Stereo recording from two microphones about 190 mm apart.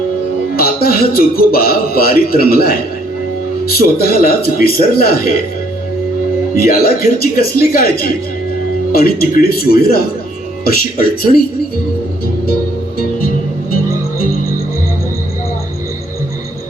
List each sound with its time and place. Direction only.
0.5 s speech: 50° left (ahead or behind)
3.9 s speech: 55° left (ahead or behind)
6.5 s speech: 50° left (ahead or behind)
11.2 s speech: 50° left (ahead or behind)
13.1 s music: 50° left (ahead or behind)